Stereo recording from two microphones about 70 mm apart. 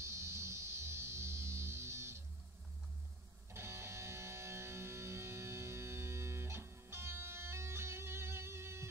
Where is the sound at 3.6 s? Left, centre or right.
Right.